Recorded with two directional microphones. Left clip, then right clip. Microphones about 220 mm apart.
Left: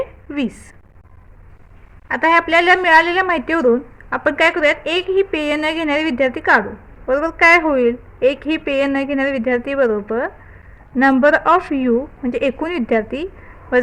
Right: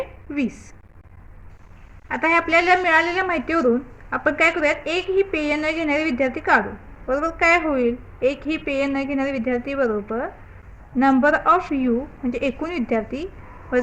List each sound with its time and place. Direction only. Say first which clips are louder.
0.3 s a woman's voice: left 1 dB; 40° left (ahead or behind)
2.0 s a woman's voice: left 5 dB; 35° left (ahead or behind)